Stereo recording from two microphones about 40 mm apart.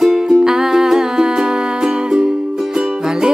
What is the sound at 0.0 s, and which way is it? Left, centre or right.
Music, centre.